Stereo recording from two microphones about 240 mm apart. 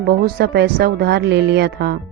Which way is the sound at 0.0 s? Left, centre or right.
Right.